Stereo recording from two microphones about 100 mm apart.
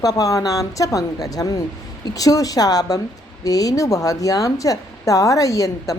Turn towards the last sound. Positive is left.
turn(degrees=35)  # may be behind; listen again after turning